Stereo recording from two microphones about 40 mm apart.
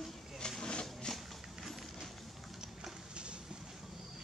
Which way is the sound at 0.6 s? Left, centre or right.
Centre.